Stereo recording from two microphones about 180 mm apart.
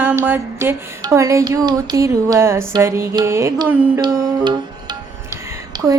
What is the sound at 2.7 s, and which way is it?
Music, 15° right (ahead or behind).